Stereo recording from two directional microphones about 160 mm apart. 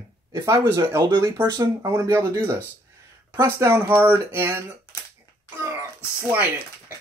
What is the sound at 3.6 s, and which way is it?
Music, 15° right (ahead or behind).